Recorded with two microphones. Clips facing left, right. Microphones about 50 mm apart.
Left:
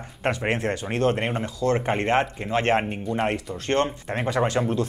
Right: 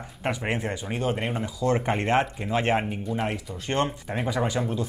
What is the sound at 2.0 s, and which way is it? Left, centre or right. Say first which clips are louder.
Speech: left 1 dB; left.